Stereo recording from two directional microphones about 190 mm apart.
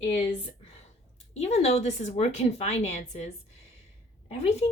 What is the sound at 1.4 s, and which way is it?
A woman's voice, 35° left (ahead or behind).